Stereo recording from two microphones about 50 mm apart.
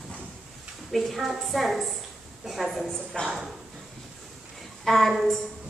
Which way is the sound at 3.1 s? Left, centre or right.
Centre.